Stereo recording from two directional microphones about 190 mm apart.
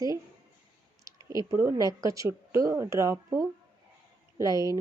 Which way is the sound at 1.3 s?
15° right (ahead or behind).